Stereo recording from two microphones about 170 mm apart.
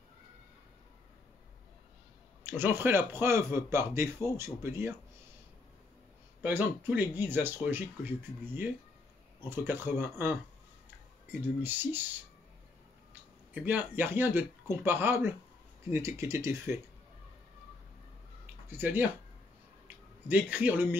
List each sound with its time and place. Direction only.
2.4 s speech: 15° right (ahead or behind)
6.4 s speech: 10° right (ahead or behind)
11.6 s speech: 10° right (ahead or behind)
13.5 s speech: 10° right (ahead or behind)
18.7 s speech: 10° right (ahead or behind)
20.2 s speech: 10° right (ahead or behind)